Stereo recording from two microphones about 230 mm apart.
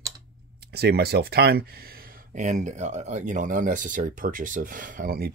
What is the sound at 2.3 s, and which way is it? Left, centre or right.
Speech, right.